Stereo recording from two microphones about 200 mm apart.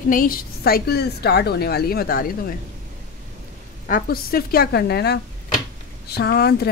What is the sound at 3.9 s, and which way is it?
A woman's voice, 50° left (ahead or behind).